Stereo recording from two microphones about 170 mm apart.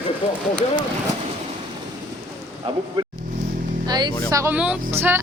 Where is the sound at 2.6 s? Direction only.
30° right (ahead or behind).